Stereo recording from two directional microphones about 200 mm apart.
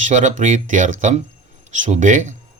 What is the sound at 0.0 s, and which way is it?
Speech, 40° right (ahead or behind).